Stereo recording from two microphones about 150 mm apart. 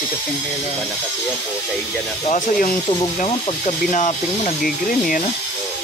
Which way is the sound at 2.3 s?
55° left (ahead or behind).